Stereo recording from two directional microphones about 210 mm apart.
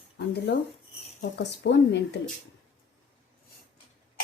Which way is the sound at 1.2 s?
55° left (ahead or behind).